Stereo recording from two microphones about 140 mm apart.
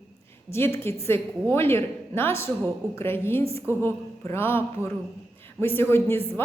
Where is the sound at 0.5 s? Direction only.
15° left (ahead or behind).